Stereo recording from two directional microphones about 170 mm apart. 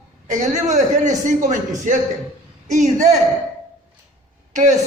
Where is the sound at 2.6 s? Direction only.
45° right (ahead or behind).